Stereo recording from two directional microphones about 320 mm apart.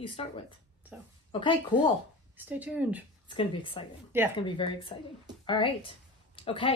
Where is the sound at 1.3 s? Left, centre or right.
Centre.